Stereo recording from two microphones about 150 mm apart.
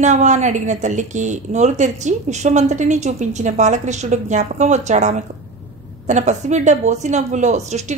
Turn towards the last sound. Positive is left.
turn(degrees=-50)  # may be behind; listen again after turning